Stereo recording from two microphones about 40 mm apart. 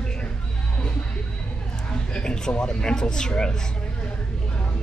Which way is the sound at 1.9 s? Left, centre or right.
Left.